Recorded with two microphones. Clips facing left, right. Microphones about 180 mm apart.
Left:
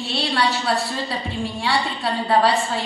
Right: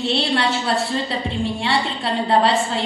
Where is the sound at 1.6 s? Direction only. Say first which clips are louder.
Right 1 dB; 25° right (ahead or behind).